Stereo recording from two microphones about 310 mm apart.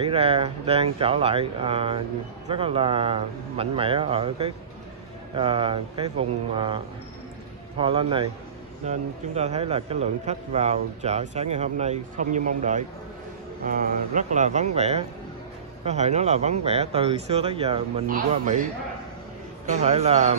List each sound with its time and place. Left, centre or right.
0.0 s a man's voice: centre